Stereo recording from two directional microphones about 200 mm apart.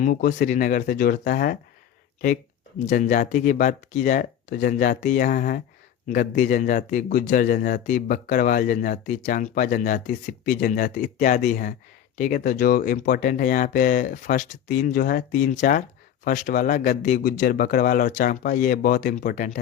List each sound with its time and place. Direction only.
0.0 s speech: 45° left (ahead or behind)
2.8 s speech: 40° left (ahead or behind)